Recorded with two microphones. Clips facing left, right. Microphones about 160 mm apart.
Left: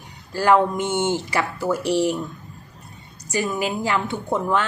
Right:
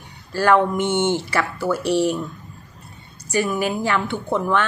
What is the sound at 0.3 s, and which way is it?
A woman's voice, 20° left (ahead or behind).